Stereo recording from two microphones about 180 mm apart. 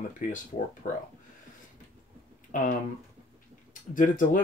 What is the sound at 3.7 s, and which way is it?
Speech, 45° left (ahead or behind).